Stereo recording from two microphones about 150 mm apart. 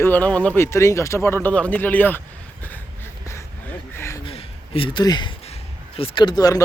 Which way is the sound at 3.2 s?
15° left (ahead or behind).